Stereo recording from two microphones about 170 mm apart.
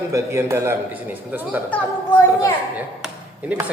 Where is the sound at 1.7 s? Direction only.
15° left (ahead or behind).